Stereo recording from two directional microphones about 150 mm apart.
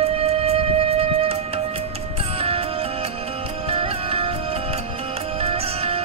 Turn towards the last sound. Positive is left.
turn(degrees=-40)  # may be behind; listen again after turning